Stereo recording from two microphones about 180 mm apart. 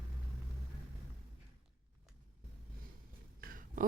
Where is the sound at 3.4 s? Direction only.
50° right (ahead or behind).